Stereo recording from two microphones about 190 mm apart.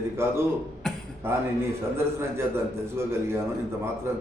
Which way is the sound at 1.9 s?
15° right (ahead or behind).